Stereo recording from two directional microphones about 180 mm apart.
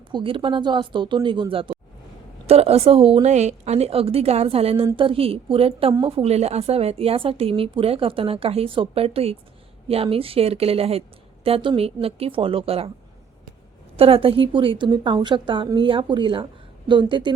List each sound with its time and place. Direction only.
0.1 s a woman's voice: 30° right (ahead or behind)
13.9 s a woman's voice: 30° right (ahead or behind)